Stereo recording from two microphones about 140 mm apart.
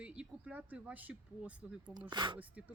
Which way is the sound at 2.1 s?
35° right (ahead or behind).